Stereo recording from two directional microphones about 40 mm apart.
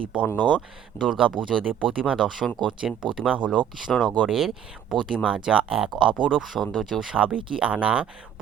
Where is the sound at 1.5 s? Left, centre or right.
Centre.